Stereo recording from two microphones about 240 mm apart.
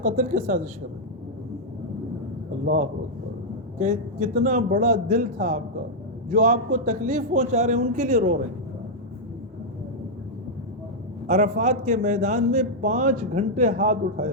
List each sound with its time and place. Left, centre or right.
0.0 s a man's voice: right
2.6 s a man's voice: right
6.7 s a man's voice: right
11.3 s a man's voice: right